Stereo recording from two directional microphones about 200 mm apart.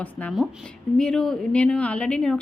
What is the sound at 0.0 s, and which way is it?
A woman's voice, 5° left (ahead or behind).